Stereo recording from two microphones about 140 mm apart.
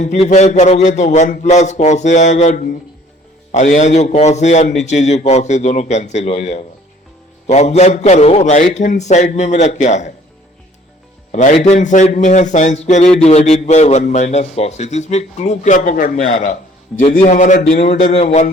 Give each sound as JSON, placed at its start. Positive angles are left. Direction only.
{"t": 0.0, "sound": "a man's voice", "side_deg": 60}
{"t": 11.3, "sound": "a man's voice", "side_deg": 60}
{"t": 16.9, "sound": "a man's voice", "side_deg": 5}
{"t": 17.2, "sound": "a man's voice", "side_deg": 65}
{"t": 17.9, "sound": "speech", "side_deg": 50}